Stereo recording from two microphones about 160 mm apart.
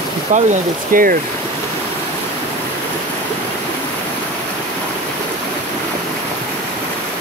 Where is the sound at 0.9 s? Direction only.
60° right (ahead or behind).